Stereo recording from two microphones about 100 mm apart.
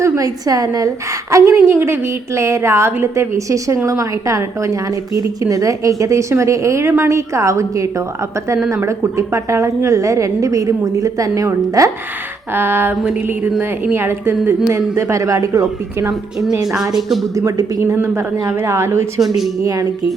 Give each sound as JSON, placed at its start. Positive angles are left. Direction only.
{"t": 0.0, "sound": "a woman's voice", "side_deg": -35}
{"t": 12.5, "sound": "a woman's voice", "side_deg": -25}
{"t": 16.7, "sound": "speech", "side_deg": -5}
{"t": 17.3, "sound": "a woman's voice", "side_deg": -30}